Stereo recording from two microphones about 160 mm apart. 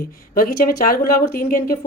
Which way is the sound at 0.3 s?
65° left (ahead or behind).